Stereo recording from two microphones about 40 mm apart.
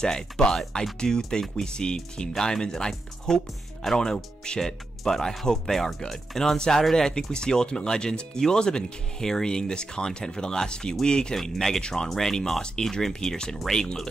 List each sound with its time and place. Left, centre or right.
0.0 s speech: centre
11.3 s speech: centre